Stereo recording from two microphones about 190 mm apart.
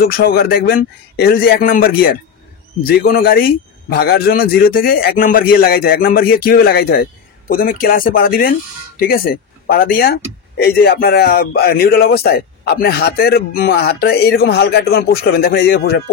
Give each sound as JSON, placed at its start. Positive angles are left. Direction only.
{"t": 0.0, "sound": "a man's voice", "side_deg": 55}